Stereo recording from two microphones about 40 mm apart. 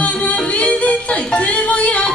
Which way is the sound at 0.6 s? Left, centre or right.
Left.